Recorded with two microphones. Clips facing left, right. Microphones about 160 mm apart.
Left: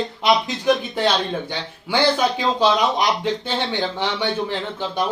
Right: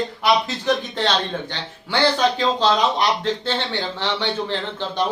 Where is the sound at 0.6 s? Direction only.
10° left (ahead or behind).